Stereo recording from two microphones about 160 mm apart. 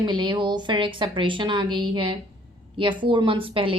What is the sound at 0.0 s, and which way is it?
A woman's voice, 30° right (ahead or behind).